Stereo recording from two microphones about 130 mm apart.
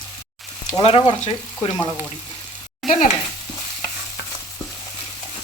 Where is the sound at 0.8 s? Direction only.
45° left (ahead or behind).